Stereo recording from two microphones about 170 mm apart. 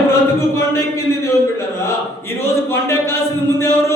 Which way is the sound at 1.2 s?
15° left (ahead or behind).